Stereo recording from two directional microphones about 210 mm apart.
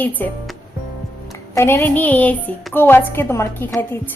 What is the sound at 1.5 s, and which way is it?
A woman's voice, 10° left (ahead or behind).